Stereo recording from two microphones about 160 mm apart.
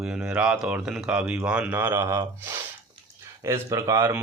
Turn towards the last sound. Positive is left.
turn(degrees=-20)  # may be behind; listen again after turning